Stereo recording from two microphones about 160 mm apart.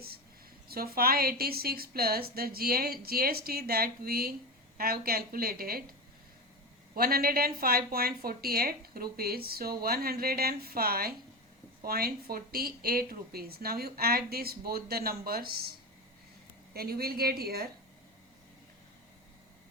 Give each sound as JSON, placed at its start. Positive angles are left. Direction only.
{"t": 0.7, "sound": "a woman's voice", "side_deg": -70}
{"t": 6.9, "sound": "a woman's voice", "side_deg": -70}
{"t": 16.7, "sound": "a woman's voice", "side_deg": -70}